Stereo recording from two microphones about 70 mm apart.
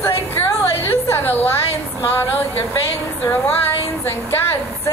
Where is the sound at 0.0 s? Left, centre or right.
Left.